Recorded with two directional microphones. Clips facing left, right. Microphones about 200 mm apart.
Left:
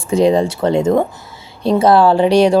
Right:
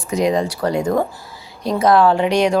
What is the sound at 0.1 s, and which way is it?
Speech, 30° left (ahead or behind).